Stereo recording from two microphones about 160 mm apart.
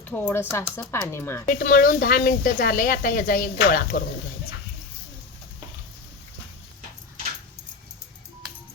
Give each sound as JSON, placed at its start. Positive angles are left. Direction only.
{"t": 0.0, "sound": "speech", "side_deg": 10}
{"t": 1.5, "sound": "speech", "side_deg": 65}